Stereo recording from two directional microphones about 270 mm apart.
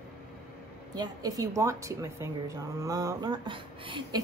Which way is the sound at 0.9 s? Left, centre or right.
Centre.